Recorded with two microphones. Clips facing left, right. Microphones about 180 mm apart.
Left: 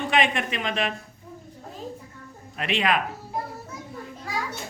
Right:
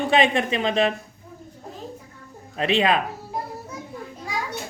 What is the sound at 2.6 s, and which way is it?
Speech, 30° right (ahead or behind).